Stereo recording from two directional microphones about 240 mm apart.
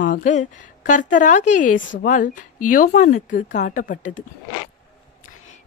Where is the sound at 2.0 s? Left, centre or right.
Left.